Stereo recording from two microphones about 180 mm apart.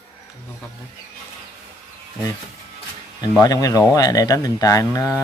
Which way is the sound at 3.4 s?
20° left (ahead or behind).